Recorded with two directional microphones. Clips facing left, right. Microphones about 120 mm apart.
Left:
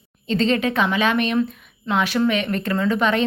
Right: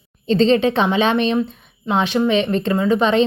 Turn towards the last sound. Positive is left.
turn(degrees=-20)  # may be behind; listen again after turning